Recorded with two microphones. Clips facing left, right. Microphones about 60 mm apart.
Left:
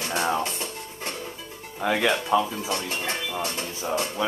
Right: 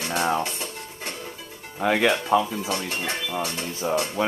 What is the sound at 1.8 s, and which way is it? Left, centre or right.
Speech, right.